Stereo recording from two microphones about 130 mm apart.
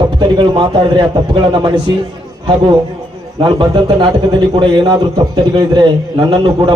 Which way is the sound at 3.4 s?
35° right (ahead or behind).